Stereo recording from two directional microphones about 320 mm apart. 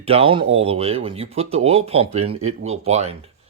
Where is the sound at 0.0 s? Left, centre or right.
Centre.